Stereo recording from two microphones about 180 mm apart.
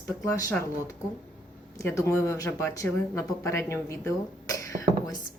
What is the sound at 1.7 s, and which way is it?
Speech, 15° left (ahead or behind).